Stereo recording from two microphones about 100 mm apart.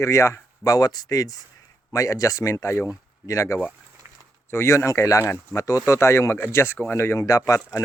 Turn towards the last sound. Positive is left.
turn(degrees=35)  # may be behind; listen again after turning